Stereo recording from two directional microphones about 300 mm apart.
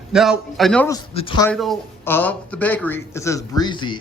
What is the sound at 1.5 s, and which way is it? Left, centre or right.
A man's voice, centre.